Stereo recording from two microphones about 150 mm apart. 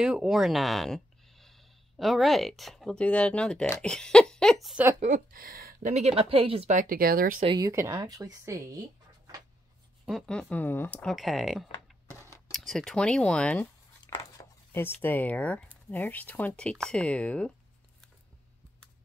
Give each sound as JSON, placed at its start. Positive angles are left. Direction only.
{"t": 0.0, "sound": "speech", "side_deg": -5}
{"t": 5.0, "sound": "speech", "side_deg": -65}
{"t": 5.9, "sound": "a woman's voice", "side_deg": -50}
{"t": 6.7, "sound": "speech", "side_deg": -65}
{"t": 7.4, "sound": "speech", "side_deg": -25}
{"t": 10.0, "sound": "speech", "side_deg": 0}
{"t": 14.1, "sound": "speech", "side_deg": 20}